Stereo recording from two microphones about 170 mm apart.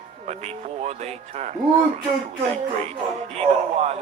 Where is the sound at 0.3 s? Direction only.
40° right (ahead or behind).